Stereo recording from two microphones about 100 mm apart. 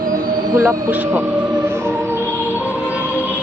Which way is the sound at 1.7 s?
25° right (ahead or behind).